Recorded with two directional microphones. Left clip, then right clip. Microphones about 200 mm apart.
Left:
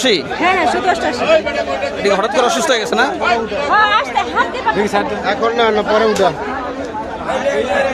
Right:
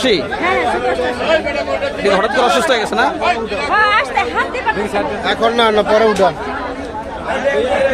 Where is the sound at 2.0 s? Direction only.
10° left (ahead or behind).